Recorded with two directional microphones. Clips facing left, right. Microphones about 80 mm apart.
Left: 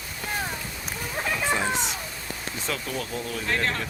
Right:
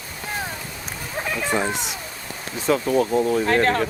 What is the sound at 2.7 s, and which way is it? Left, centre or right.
Speech, right.